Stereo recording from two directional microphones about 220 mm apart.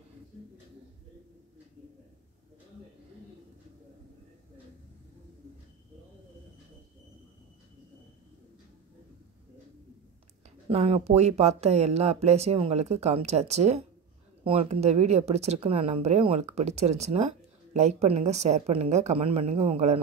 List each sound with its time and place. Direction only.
10.7 s speech: 30° right (ahead or behind)